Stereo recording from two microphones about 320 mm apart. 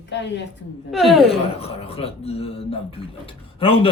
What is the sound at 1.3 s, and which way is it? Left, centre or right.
Speech, centre.